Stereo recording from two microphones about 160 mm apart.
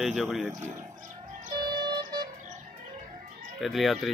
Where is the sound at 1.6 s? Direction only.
25° right (ahead or behind).